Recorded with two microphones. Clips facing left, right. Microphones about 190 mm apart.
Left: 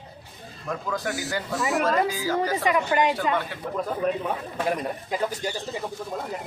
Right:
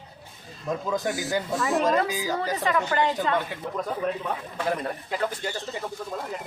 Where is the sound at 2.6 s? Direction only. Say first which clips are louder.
Left 1 dB; 15° left (ahead or behind).